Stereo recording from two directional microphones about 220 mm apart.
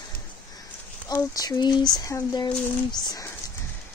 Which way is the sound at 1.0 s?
15° left (ahead or behind).